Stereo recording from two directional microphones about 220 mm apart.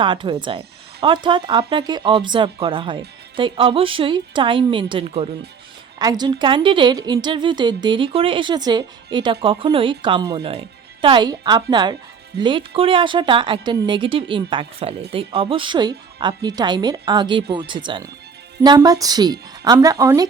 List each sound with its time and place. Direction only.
0.0 s a woman's voice: 20° right (ahead or behind)